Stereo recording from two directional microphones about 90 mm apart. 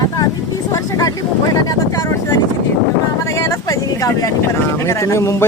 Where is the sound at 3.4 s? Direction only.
40° left (ahead or behind).